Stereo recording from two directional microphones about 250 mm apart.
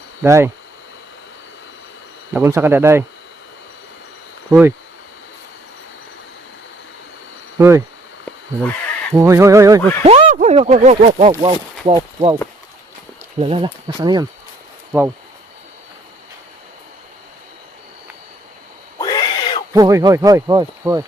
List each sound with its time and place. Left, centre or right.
0.2 s speech: centre
2.3 s speech: centre
7.6 s speech: centre
8.2 s a sound: centre
9.1 s speech: centre
10.0 s speech: right
13.4 s speech: right
18.9 s a sound: centre
19.7 s speech: centre